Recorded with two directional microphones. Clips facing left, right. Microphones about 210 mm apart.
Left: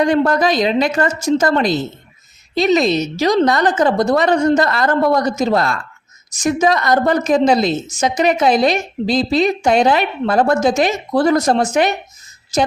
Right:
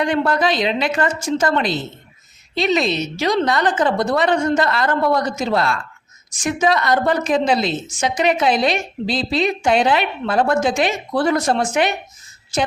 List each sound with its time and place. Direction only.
0.0 s a woman's voice: 40° left (ahead or behind)